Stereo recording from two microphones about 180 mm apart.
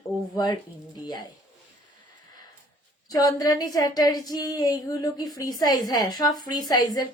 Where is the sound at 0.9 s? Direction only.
25° left (ahead or behind).